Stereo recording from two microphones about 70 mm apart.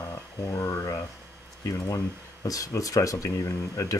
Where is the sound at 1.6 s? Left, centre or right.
Left.